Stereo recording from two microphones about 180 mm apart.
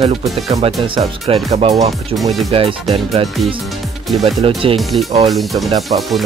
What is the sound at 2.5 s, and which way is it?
Speech, 30° right (ahead or behind).